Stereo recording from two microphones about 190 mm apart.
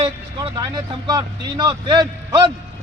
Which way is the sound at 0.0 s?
20° right (ahead or behind).